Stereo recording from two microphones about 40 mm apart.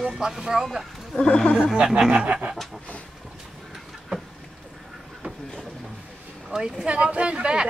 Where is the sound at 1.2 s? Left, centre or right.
Left.